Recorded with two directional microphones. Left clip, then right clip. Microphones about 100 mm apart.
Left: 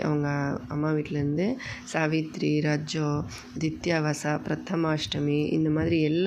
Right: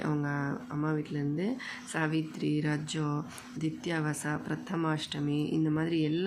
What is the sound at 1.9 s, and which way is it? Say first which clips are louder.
Speech: left 6 dB; 35° left (ahead or behind).